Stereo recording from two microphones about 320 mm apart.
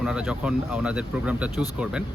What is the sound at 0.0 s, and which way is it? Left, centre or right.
Speech, centre.